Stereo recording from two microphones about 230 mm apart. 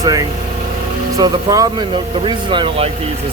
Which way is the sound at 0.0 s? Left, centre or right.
Centre.